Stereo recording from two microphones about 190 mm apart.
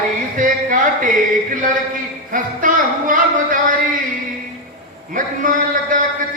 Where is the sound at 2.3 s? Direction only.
45° right (ahead or behind).